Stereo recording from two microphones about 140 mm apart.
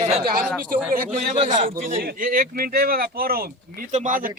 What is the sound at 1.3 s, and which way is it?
Speech, 60° right (ahead or behind).